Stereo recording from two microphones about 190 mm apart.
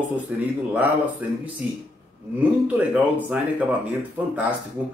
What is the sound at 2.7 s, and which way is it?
Speech, 10° right (ahead or behind).